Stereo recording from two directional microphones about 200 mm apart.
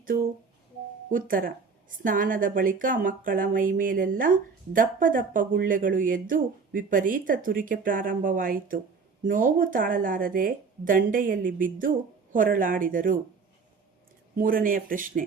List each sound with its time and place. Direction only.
1.1 s speech: 45° right (ahead or behind)
14.3 s speech: 45° right (ahead or behind)